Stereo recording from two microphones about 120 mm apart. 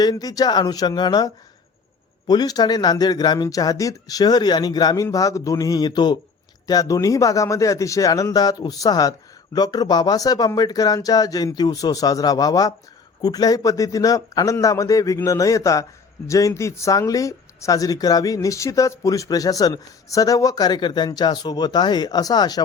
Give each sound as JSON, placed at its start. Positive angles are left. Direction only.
{"t": 0.0, "sound": "a man's voice", "side_deg": 35}